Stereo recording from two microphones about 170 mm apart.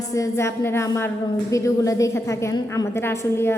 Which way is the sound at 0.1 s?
15° left (ahead or behind).